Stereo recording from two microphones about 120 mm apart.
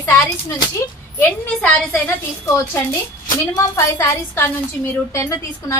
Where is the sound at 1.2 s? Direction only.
15° left (ahead or behind).